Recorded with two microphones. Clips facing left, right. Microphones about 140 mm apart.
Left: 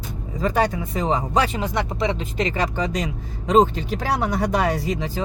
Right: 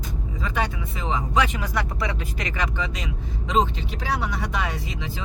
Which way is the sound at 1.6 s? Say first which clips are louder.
Left 4 dB; 25° left (ahead or behind).